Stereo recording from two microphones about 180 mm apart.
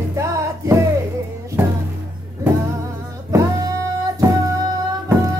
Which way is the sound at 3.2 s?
20° right (ahead or behind).